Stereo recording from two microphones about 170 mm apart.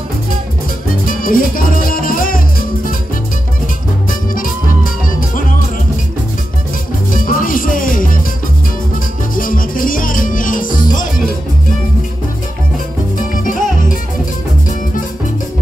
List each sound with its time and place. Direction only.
1.0 s music: 55° left (ahead or behind)
7.2 s music: 55° left (ahead or behind)
9.3 s music: 55° left (ahead or behind)
13.4 s music: 50° left (ahead or behind)